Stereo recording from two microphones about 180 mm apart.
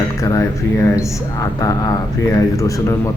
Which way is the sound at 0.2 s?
15° left (ahead or behind).